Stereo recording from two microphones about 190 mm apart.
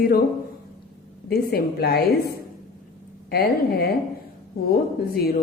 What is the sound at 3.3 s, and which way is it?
Speech, 55° left (ahead or behind).